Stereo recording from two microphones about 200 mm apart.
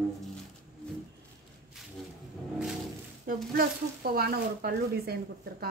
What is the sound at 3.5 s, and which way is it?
Speech, 50° right (ahead or behind).